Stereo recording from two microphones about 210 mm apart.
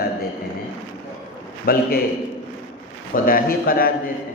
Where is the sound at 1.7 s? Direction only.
45° left (ahead or behind).